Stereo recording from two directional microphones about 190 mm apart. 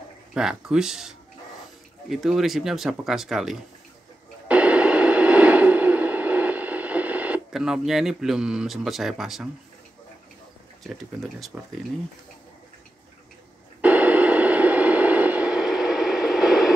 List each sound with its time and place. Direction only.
0.3 s speech: 5° right (ahead or behind)
4.5 s radio: 5° right (ahead or behind)
10.8 s speech: centre (ahead or behind)
13.7 s radio: 10° right (ahead or behind)